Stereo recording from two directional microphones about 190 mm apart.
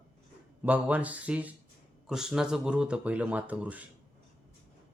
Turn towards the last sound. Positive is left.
turn(degrees=-5)  # may be behind; listen again after turning